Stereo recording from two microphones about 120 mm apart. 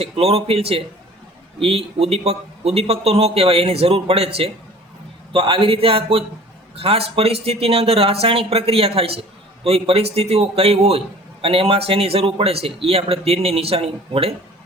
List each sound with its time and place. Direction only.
0.0 s a man's voice: 60° right (ahead or behind)